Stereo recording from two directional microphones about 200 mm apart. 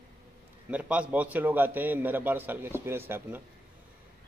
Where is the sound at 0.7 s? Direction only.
5° right (ahead or behind).